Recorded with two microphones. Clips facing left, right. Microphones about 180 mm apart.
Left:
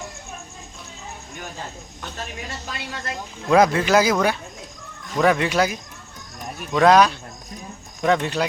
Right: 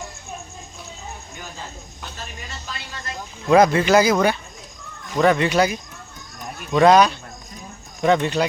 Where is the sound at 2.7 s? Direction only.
65° left (ahead or behind).